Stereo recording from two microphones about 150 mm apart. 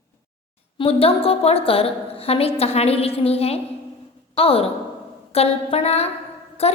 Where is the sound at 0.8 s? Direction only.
40° left (ahead or behind).